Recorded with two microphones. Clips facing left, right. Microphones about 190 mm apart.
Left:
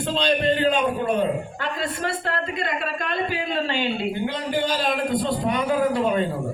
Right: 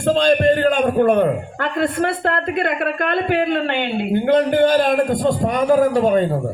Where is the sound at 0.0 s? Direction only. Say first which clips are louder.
Right 7 dB; 50° right (ahead or behind).